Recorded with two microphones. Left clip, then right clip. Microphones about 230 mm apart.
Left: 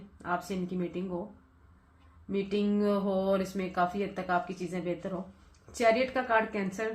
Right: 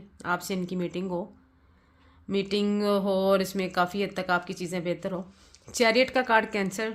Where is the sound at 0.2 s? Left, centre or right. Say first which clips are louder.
Right 4 dB; right.